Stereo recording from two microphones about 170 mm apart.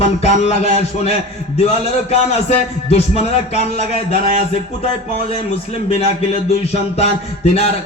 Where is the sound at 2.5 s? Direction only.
40° left (ahead or behind).